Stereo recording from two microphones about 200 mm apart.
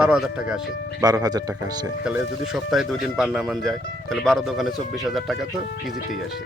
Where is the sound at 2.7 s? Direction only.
Centre (ahead or behind).